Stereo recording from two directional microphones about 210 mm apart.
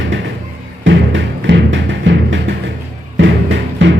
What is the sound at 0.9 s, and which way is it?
Music, 60° right (ahead or behind).